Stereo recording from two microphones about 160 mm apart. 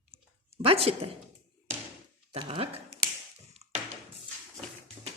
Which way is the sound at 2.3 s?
35° right (ahead or behind).